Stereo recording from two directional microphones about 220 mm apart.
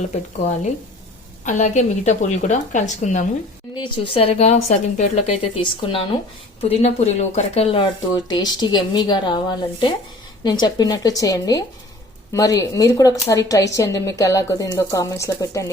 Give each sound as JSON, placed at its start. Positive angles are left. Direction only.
{"t": 1.5, "sound": "a woman's voice", "side_deg": 35}
{"t": 3.8, "sound": "speech", "side_deg": 20}